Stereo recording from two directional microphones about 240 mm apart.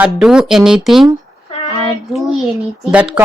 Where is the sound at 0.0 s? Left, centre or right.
Centre.